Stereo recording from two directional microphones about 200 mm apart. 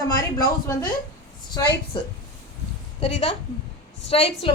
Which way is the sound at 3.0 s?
30° left (ahead or behind).